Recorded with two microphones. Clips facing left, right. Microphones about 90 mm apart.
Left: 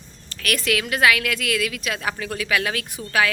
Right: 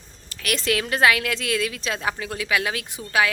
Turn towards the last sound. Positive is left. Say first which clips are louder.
# even
turn(degrees=-20)  # may be behind; listen again after turning